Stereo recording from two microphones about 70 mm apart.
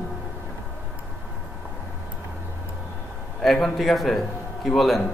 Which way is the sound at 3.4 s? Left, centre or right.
Centre.